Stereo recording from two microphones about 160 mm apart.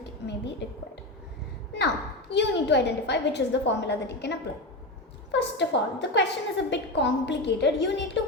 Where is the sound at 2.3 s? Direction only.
90° left.